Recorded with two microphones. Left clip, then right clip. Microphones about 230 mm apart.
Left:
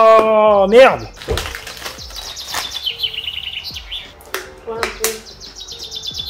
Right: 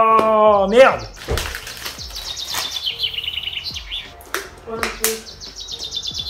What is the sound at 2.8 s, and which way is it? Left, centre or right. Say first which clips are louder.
Chirp: left 2 dB; left.